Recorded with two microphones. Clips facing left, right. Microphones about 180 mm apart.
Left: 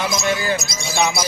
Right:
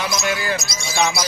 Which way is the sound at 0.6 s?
55° left (ahead or behind).